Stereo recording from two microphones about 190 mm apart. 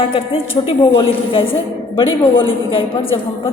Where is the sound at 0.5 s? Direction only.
30° left (ahead or behind).